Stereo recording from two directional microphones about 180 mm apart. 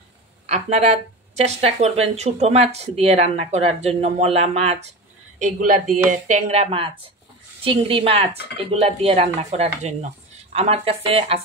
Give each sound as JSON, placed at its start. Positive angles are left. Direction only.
{"t": 0.5, "sound": "a woman's voice", "side_deg": -35}
{"t": 6.0, "sound": "a woman's voice", "side_deg": -40}